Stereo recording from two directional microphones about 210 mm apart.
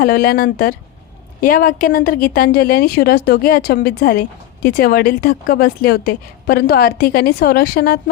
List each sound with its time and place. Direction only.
0.0 s a woman's voice: 45° left (ahead or behind)